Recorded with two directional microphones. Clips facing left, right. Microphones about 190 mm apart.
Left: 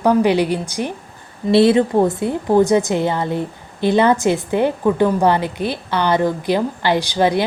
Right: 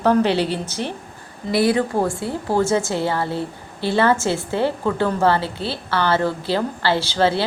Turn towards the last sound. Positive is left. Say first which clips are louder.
# left 3 dB
turn(degrees=15)  # may be behind; listen again after turning